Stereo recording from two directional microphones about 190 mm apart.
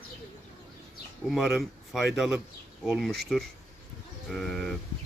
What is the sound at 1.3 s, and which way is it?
Speech, centre (ahead or behind).